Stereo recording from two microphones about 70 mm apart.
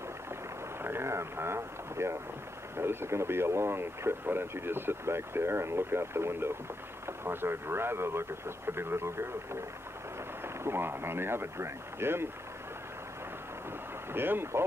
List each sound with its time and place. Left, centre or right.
0.8 s speech: right
14.1 s speech: right